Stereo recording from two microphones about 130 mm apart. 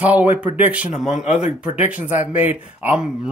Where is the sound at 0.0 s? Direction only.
10° right (ahead or behind).